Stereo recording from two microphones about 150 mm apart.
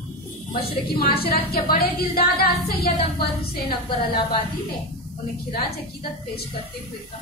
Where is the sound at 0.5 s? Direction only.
90° left.